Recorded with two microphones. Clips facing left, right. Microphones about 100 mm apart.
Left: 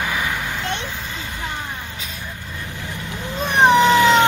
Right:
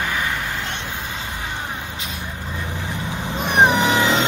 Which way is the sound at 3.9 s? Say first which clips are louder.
Left 5 dB; 20° right (ahead or behind).